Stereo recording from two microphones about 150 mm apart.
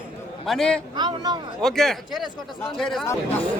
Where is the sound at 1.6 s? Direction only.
5° left (ahead or behind).